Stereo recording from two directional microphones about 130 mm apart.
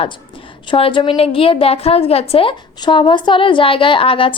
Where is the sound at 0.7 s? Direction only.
40° left (ahead or behind).